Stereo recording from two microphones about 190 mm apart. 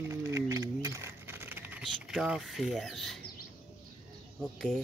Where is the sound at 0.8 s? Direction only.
15° right (ahead or behind); by 3.2 s centre (ahead or behind).